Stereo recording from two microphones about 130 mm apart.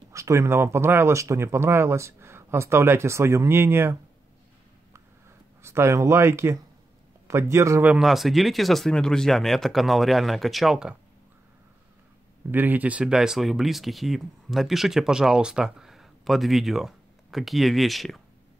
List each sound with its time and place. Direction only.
0.1 s speech: 25° right (ahead or behind)
5.6 s speech: 20° right (ahead or behind)
7.9 s speech: centre (ahead or behind)
12.4 s speech: 15° right (ahead or behind)